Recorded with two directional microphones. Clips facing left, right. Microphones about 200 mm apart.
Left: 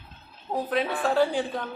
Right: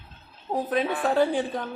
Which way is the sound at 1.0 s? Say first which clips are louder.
Even; 20° right (ahead or behind).